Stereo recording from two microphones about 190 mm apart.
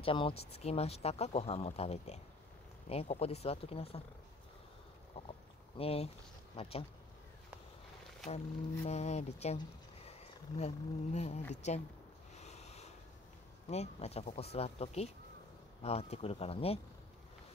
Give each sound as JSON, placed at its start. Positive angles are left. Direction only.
{"t": 0.0, "sound": "speech", "side_deg": 25}
{"t": 5.2, "sound": "speech", "side_deg": 30}
{"t": 8.8, "sound": "speech", "side_deg": 35}
{"t": 10.6, "sound": "speech", "side_deg": 35}
{"t": 12.4, "sound": "a sound", "side_deg": 35}
{"t": 13.7, "sound": "speech", "side_deg": 35}